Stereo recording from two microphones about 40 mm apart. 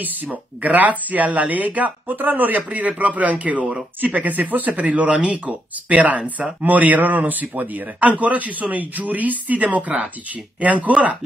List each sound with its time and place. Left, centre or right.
0.0 s speech: right